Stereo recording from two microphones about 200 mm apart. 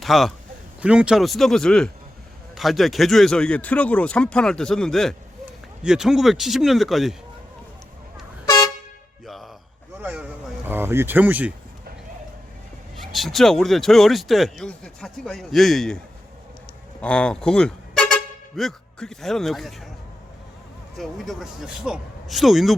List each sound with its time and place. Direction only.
0.0 s speech: centre (ahead or behind)
8.4 s vehicle horn: 20° left (ahead or behind)
9.2 s music: centre (ahead or behind)
10.0 s speech: 5° right (ahead or behind)
13.0 s speech: centre (ahead or behind)
17.0 s speech: 5° left (ahead or behind)
20.9 s speech: centre (ahead or behind)